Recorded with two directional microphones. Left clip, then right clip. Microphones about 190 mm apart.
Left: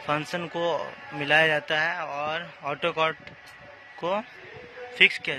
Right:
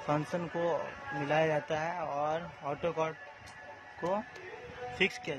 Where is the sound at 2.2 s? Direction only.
15° right (ahead or behind).